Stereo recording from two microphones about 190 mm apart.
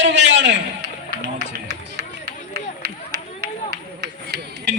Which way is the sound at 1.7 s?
60° right (ahead or behind).